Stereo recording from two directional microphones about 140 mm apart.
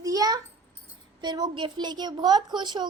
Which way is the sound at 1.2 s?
30° right (ahead or behind).